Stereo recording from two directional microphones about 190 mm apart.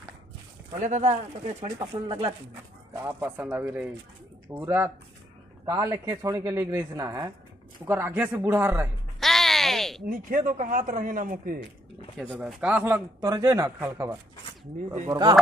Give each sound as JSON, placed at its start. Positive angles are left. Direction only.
{"t": 0.7, "sound": "speech", "side_deg": -40}
{"t": 1.6, "sound": "speech", "side_deg": -25}
{"t": 3.0, "sound": "speech", "side_deg": -10}
{"t": 9.2, "sound": "a sound", "side_deg": 0}
{"t": 10.0, "sound": "a man's voice", "side_deg": -45}
{"t": 12.2, "sound": "speech", "side_deg": 0}